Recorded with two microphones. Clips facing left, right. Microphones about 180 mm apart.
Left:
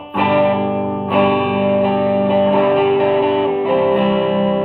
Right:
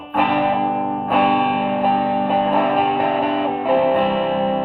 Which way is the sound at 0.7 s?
45° right (ahead or behind).